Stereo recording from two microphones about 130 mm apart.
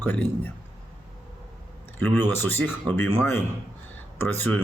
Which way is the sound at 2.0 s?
15° left (ahead or behind).